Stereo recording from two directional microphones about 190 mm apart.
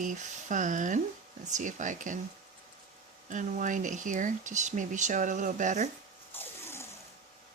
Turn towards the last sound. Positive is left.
turn(degrees=15)  # may be behind; listen again after turning